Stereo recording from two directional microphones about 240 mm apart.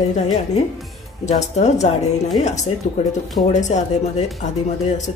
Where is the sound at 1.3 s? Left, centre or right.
Left.